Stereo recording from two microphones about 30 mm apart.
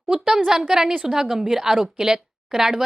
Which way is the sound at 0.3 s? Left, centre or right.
Centre.